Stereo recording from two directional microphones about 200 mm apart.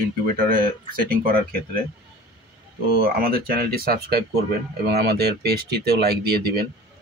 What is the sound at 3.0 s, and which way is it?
Speech, 45° right (ahead or behind).